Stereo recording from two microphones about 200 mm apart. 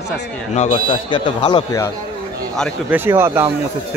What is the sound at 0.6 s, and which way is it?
Speech, 30° left (ahead or behind).